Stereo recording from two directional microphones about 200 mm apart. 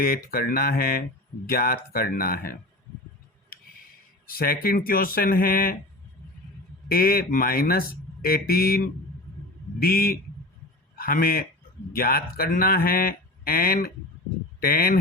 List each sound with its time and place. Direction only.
0.0 s speech: 50° left (ahead or behind)
4.3 s speech: 50° left (ahead or behind)
6.8 s a man's voice: 50° left (ahead or behind)